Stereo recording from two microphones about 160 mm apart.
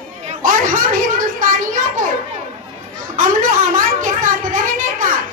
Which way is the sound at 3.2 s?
55° right (ahead or behind).